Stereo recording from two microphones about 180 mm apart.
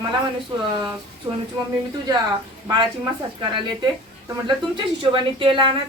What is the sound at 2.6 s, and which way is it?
Speech, 20° right (ahead or behind).